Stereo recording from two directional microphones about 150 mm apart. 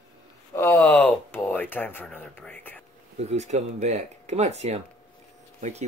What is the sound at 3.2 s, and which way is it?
Speech, 45° right (ahead or behind).